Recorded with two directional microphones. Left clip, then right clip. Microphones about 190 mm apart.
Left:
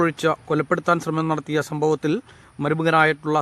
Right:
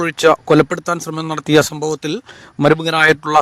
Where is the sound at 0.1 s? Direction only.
40° right (ahead or behind).